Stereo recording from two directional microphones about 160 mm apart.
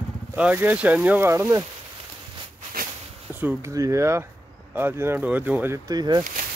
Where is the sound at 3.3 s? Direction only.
10° right (ahead or behind).